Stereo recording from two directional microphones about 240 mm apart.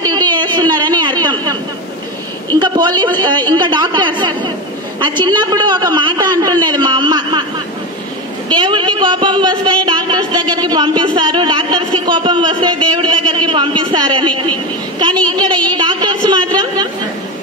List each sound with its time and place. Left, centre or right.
0.0 s a sound: centre
2.6 s a man's voice: centre
8.5 s a man's voice: centre